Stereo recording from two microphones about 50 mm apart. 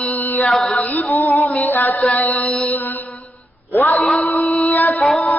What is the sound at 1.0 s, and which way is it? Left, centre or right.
Music, left.